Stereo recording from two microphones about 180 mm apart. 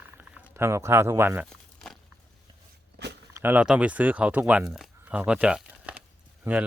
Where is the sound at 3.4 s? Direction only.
10° right (ahead or behind).